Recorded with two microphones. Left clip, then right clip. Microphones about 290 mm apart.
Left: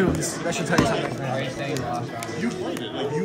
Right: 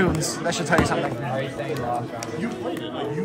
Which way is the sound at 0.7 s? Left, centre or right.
Right.